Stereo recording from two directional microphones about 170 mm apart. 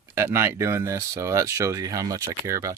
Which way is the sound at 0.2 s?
15° right (ahead or behind).